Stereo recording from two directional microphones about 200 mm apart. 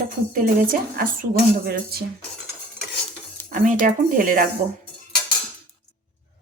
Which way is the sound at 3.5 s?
40° right (ahead or behind).